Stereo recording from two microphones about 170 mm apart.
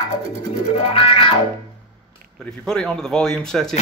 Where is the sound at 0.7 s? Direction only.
35° left (ahead or behind).